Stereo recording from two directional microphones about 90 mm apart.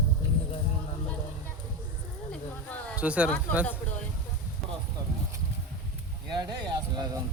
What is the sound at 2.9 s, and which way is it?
Speech, 15° right (ahead or behind).